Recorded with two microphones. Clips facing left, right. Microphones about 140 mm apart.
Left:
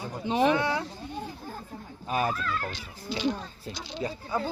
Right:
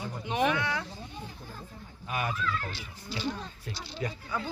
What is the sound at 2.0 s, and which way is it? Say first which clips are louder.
Speech: left 4 dB; 35° left (ahead or behind).